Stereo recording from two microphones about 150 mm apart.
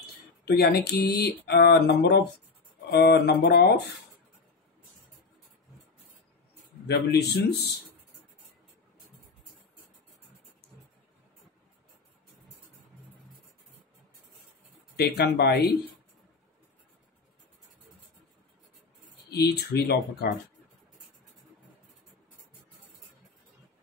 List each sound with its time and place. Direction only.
0.6 s speech: 90° left
6.9 s speech: 90° left
15.0 s speech: 90° left
19.3 s speech: 90° left